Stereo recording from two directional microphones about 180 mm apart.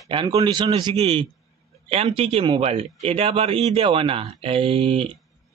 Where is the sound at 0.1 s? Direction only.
25° right (ahead or behind).